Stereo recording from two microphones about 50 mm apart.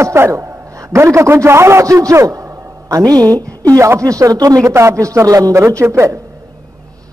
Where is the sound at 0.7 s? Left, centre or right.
Right.